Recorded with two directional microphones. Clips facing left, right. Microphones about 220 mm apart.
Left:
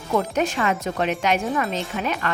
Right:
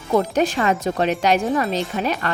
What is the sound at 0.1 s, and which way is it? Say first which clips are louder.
Speech: right 4 dB; 35° right (ahead or behind).